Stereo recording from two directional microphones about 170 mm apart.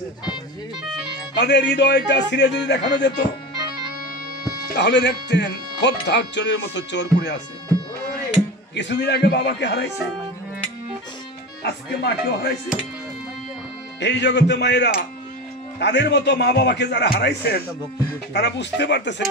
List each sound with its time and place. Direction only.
1.3 s speech: 90° left
4.7 s speech: 90° left
8.7 s a man's voice: 85° left
11.6 s a man's voice: 75° left (ahead or behind)
13.9 s speech: 85° left